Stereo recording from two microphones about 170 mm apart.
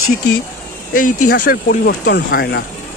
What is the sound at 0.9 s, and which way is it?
Speech, 55° left (ahead or behind).